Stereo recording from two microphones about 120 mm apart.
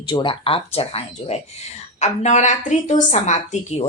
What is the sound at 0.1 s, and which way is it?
Speech, 40° left (ahead or behind).